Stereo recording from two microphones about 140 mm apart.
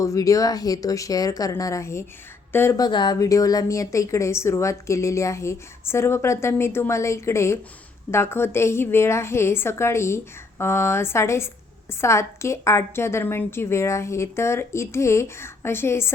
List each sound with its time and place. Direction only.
0.0 s a woman's voice: 25° left (ahead or behind)
2.7 s a woman's voice: 30° left (ahead or behind)